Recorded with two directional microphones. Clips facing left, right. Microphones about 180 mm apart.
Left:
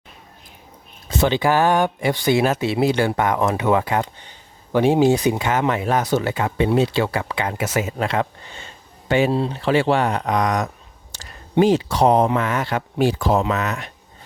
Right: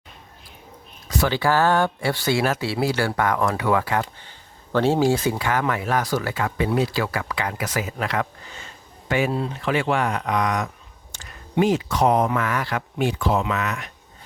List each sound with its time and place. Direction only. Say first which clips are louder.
1.0 s speech: left 3 dB; 25° left (ahead or behind)